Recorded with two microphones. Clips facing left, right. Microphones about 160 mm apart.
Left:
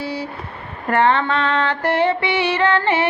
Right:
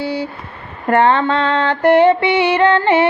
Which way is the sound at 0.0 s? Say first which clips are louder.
Right 5 dB; 25° right (ahead or behind).